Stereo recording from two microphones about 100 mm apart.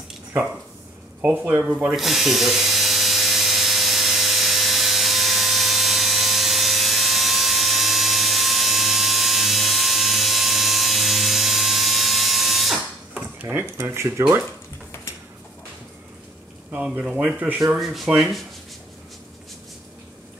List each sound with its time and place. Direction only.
1.2 s speech: 20° right (ahead or behind)
1.8 s electric toothbrush: 5° right (ahead or behind)
13.1 s dishes: 15° right (ahead or behind)
13.7 s speech: 25° right (ahead or behind)
16.7 s speech: 15° right (ahead or behind)
17.7 s speech: centre (ahead or behind)